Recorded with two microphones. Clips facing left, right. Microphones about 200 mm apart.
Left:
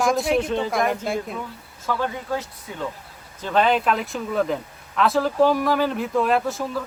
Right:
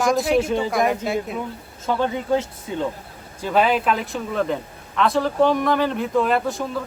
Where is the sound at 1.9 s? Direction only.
20° right (ahead or behind).